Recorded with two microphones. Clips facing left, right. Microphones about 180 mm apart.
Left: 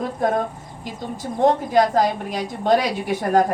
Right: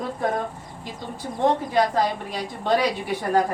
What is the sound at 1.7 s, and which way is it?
A woman's voice, 45° left (ahead or behind).